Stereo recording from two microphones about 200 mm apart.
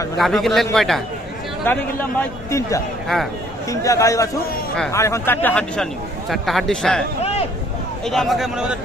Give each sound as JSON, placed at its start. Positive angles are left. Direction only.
{"t": 0.2, "sound": "a man's voice", "side_deg": 0}
{"t": 7.2, "sound": "a sound", "side_deg": 30}
{"t": 8.0, "sound": "a man's voice", "side_deg": 0}